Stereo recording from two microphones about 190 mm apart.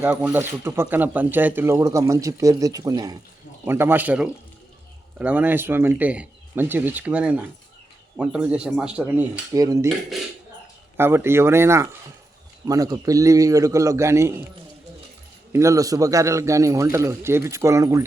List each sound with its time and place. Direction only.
0.0 s speech: 10° right (ahead or behind)
10.9 s speech: 10° right (ahead or behind)
15.5 s speech: 15° right (ahead or behind)